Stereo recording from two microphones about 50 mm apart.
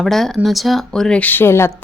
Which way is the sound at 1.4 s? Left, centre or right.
Left.